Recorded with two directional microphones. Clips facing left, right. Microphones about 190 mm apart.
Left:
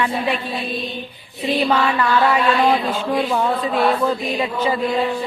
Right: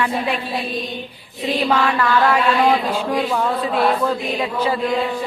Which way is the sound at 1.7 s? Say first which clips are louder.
Right 2 dB; 10° left (ahead or behind).